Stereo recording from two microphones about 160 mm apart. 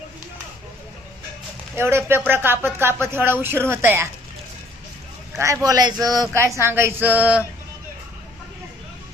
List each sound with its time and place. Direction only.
1.7 s speech: 15° right (ahead or behind)
5.4 s speech: 20° right (ahead or behind)